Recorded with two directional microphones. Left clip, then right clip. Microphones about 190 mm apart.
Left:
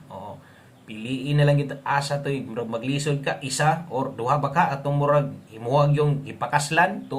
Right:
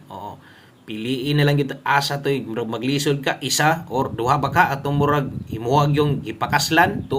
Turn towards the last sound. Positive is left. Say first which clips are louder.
# right 4 dB
turn(degrees=-35)  # may be behind; listen again after turning